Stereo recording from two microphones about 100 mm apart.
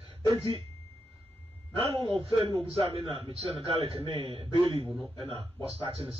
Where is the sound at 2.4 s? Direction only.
70° right (ahead or behind).